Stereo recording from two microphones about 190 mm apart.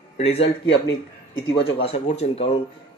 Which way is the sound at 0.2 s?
30° left (ahead or behind).